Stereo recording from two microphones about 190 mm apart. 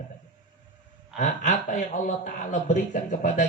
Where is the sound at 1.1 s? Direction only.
45° left (ahead or behind).